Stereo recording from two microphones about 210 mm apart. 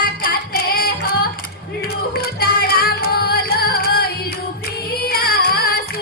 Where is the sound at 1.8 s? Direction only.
45° left (ahead or behind).